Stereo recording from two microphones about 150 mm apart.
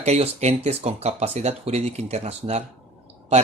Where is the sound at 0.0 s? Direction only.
45° right (ahead or behind).